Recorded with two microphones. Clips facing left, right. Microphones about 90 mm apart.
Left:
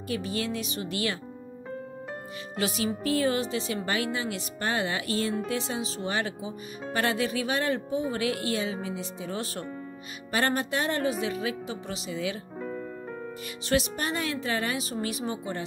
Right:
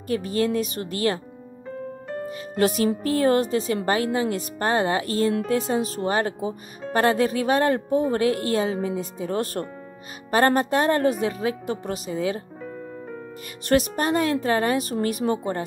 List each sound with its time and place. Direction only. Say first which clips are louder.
0.1 s a woman's voice: right 8 dB; 40° right (ahead or behind)
2.2 s music: right 9 dB; 45° right (ahead or behind)
3.0 s a woman's voice: right 5 dB; 45° right (ahead or behind)
13.7 s a woman's voice: right 6 dB; 45° right (ahead or behind)